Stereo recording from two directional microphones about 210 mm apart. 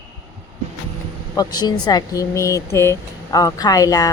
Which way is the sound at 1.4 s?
20° left (ahead or behind).